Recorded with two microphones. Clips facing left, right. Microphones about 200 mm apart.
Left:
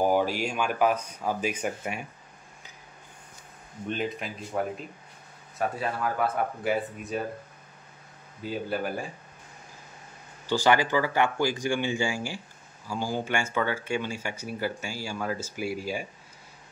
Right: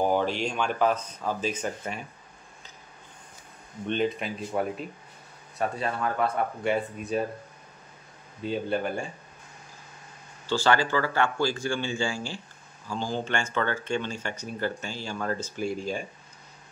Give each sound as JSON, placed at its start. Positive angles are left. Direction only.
{"t": 0.0, "sound": "speech", "side_deg": 10}
{"t": 3.8, "sound": "speech", "side_deg": 5}
{"t": 5.6, "sound": "speech", "side_deg": 5}
{"t": 8.5, "sound": "speech", "side_deg": 5}
{"t": 10.5, "sound": "speech", "side_deg": 15}